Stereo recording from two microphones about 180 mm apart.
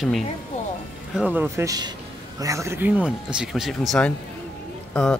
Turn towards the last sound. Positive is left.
turn(degrees=5)  # may be behind; listen again after turning